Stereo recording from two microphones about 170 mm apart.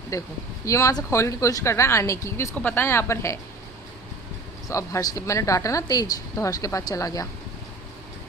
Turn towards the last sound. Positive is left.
turn(degrees=20)  # may be behind; listen again after turning